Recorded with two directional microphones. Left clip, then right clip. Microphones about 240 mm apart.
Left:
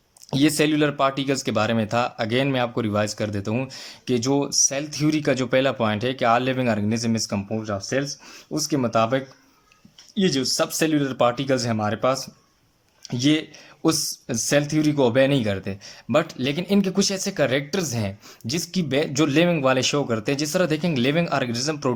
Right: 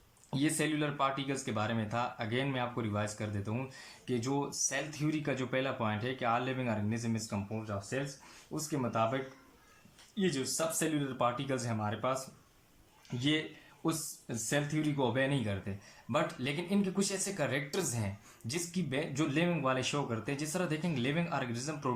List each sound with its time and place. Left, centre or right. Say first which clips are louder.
0.3 s speech: left 13 dB; left